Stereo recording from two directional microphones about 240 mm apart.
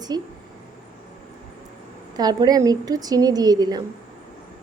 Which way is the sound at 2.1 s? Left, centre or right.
Centre.